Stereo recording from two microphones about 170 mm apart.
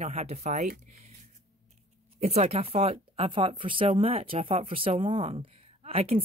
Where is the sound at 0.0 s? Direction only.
40° right (ahead or behind).